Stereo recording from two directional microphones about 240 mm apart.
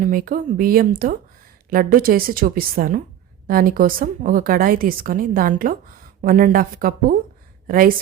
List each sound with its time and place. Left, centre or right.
0.0 s a woman's voice: right